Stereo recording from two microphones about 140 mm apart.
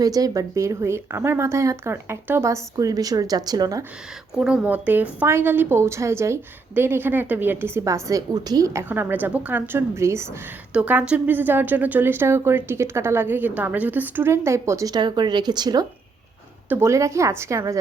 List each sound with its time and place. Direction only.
0.0 s speech: 25° right (ahead or behind)
4.4 s a woman's voice: 5° right (ahead or behind); by 15.9 s 30° right (ahead or behind)
16.6 s speech: 20° right (ahead or behind)